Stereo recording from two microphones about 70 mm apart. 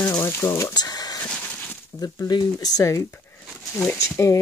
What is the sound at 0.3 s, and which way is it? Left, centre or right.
Speech, left.